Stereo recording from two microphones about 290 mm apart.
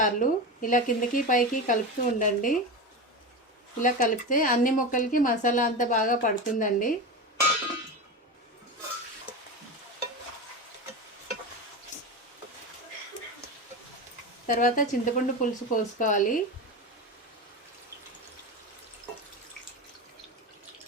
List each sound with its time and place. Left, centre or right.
0.0 s speech: left
3.8 s speech: left
14.4 s speech: left